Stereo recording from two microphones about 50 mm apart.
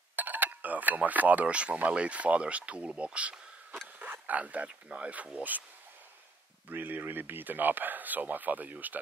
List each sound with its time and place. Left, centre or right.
0.1 s speech: right
4.0 s a sound: right
4.8 s speech: right
6.7 s speech: right